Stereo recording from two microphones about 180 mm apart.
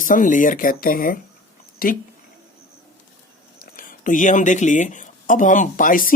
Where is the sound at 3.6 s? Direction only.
50° left (ahead or behind).